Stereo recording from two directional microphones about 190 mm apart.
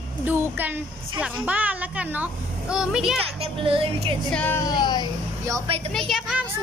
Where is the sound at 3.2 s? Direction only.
30° right (ahead or behind).